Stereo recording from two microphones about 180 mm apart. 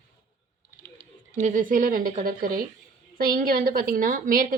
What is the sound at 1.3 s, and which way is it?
A woman's voice, 45° right (ahead or behind).